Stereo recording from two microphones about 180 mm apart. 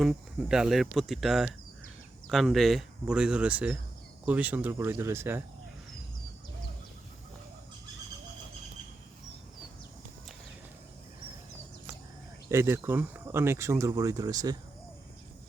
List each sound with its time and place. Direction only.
0.0 s speech: centre (ahead or behind)
12.5 s speech: 15° right (ahead or behind)